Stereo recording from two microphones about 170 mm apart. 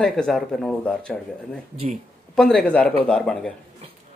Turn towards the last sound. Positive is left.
turn(degrees=5)  # may be behind; listen again after turning